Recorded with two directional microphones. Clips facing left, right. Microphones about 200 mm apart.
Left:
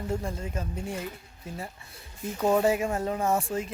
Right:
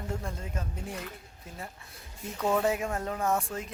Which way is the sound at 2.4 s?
25° left (ahead or behind).